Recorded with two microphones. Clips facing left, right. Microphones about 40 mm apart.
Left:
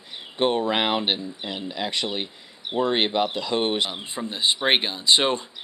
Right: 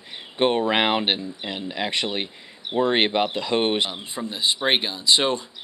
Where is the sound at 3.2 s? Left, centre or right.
Centre.